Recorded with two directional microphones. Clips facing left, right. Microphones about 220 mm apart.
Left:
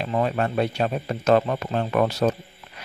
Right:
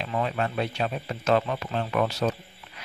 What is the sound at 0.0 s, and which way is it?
Speech, 45° left (ahead or behind).